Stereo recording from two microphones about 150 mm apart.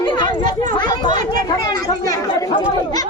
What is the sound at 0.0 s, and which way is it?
Chatter, 30° left (ahead or behind).